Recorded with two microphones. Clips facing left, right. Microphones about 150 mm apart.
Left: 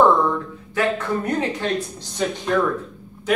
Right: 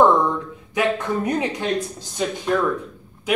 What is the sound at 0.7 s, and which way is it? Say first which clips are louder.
Speech: even; 15° right (ahead or behind).